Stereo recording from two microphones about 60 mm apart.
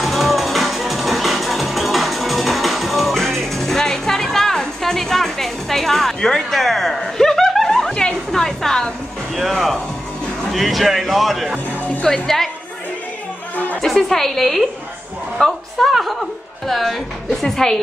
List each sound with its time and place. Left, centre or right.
0.0 s music: centre
7.9 s music: centre
8.3 s a sound: centre
9.4 s a man's voice: centre
11.5 s music: left
12.1 s a man's voice: centre
13.7 s a man's voice: centre